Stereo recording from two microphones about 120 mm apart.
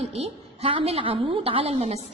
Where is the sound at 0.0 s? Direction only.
60° right (ahead or behind).